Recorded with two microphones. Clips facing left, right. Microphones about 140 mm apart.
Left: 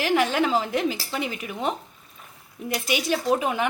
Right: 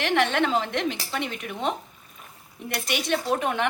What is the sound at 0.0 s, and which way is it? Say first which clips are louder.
Speech: left 1 dB; 5° left (ahead or behind).